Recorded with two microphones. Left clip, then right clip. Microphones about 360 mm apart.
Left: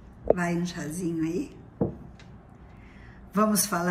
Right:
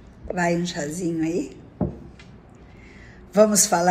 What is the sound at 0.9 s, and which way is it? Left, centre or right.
Speech, centre.